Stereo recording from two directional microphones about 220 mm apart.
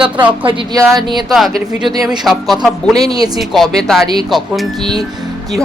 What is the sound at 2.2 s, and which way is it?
A woman's voice, centre (ahead or behind).